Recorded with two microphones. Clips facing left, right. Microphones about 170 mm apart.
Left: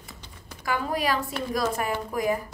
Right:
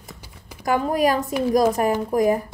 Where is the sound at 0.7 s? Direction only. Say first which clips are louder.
Right 7 dB; 45° right (ahead or behind).